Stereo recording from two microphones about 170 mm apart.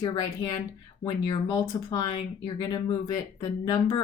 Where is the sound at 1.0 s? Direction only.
25° left (ahead or behind).